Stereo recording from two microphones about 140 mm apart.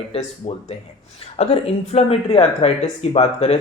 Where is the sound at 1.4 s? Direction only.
45° left (ahead or behind).